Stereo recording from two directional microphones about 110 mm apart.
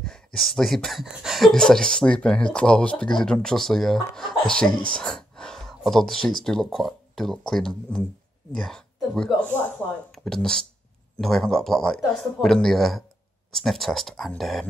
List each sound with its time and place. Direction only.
0.0 s speech: 5° left (ahead or behind)